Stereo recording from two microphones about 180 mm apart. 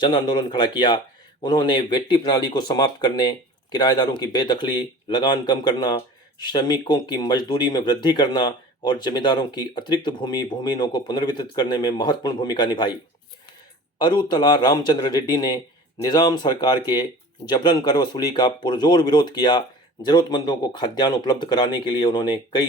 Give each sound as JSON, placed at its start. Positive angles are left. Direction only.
{"t": 0.0, "sound": "speech", "side_deg": 25}
{"t": 14.0, "sound": "speech", "side_deg": 25}